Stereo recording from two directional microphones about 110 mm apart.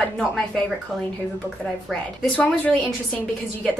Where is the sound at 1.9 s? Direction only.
10° left (ahead or behind).